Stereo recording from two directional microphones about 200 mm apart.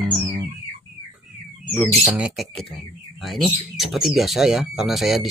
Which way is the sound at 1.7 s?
Centre (ahead or behind).